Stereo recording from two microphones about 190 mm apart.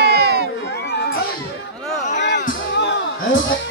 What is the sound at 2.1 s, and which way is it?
Music, 65° left (ahead or behind).